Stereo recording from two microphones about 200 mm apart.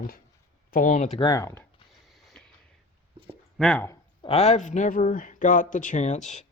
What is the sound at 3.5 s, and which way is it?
Speech, 5° left (ahead or behind).